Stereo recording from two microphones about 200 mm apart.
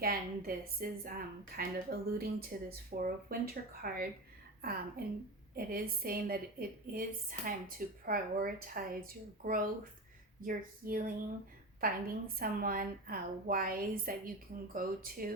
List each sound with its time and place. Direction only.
0.0 s a woman's voice: 50° right (ahead or behind)